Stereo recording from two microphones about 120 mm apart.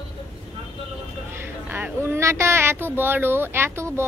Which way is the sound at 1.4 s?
15° right (ahead or behind).